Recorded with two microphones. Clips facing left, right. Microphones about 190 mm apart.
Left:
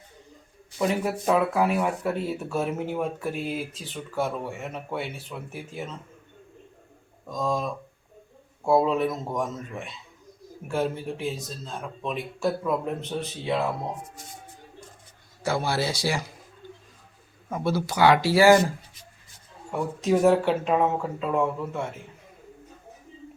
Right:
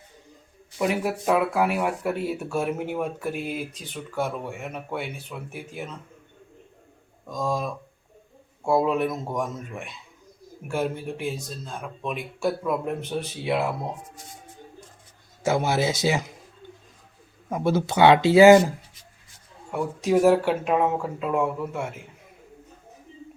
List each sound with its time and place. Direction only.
0.8 s speech: 10° right (ahead or behind)
7.3 s speech: 5° right (ahead or behind)
10.7 s speech: centre (ahead or behind)
15.4 s speech: 20° right (ahead or behind)
17.5 s speech: 15° right (ahead or behind)
19.7 s speech: centre (ahead or behind)